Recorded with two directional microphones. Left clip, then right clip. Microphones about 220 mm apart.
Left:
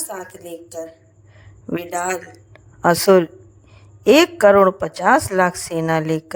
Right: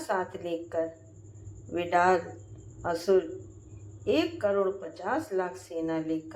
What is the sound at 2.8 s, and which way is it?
A woman's voice, 50° left (ahead or behind).